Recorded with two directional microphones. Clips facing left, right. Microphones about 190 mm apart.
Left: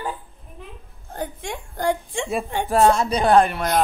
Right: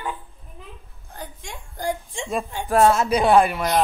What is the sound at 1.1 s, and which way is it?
A woman's voice, 55° left (ahead or behind).